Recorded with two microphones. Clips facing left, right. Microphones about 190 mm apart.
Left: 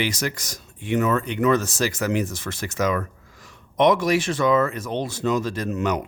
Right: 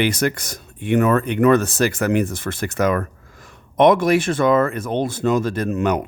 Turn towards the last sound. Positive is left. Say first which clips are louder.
# right 4 dB
turn(degrees=-55)  # may be behind; listen again after turning